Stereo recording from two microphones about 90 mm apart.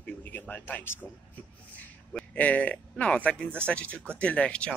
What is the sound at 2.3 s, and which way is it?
Speech, 15° left (ahead or behind).